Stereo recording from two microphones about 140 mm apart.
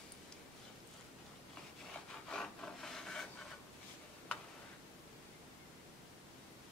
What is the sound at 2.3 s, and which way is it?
Wood, 5° left (ahead or behind).